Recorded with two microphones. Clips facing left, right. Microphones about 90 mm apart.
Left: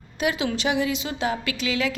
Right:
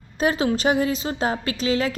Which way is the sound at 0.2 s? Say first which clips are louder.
Right 4 dB; 40° right (ahead or behind).